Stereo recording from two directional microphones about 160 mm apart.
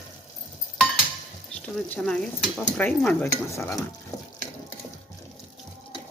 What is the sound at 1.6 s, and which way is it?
Speech, 5° left (ahead or behind).